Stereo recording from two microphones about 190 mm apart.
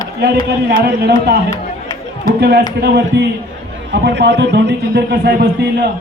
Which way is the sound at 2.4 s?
60° right (ahead or behind).